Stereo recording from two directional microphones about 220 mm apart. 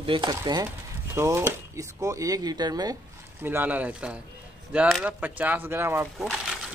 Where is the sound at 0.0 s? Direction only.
20° right (ahead or behind).